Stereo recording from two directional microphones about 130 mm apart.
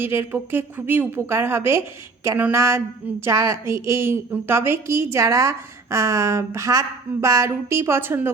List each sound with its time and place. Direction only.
0.0 s a woman's voice: 15° right (ahead or behind)